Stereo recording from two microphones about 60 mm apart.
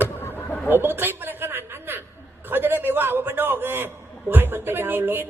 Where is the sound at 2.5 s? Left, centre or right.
Right.